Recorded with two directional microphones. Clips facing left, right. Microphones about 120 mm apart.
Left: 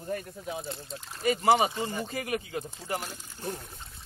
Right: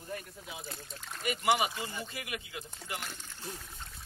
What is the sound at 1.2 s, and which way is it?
Speech, 35° left (ahead or behind).